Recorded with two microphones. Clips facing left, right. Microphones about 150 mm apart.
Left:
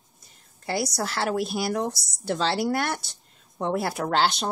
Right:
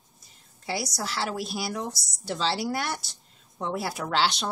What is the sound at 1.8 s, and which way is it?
Speech, centre (ahead or behind).